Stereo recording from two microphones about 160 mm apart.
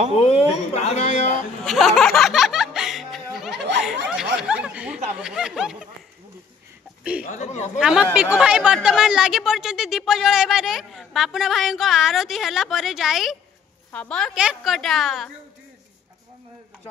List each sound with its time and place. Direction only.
0.2 s speech: 35° left (ahead or behind)
1.6 s music: centre (ahead or behind)
3.3 s laughter: centre (ahead or behind)
4.1 s snicker: 5° right (ahead or behind)
5.1 s speech: 5° right (ahead or behind)
7.0 s speech: 5° right (ahead or behind)
7.2 s speech: 45° left (ahead or behind)
7.8 s speech: 5° right (ahead or behind)
14.3 s speech: 5° right (ahead or behind)